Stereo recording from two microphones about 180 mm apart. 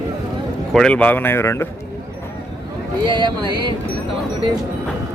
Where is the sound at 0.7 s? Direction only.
5° left (ahead or behind).